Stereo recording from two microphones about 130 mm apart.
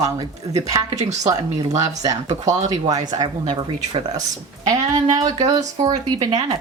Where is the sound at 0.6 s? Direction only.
25° right (ahead or behind).